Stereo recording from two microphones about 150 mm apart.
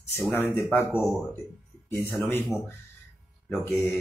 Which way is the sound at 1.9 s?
15° left (ahead or behind).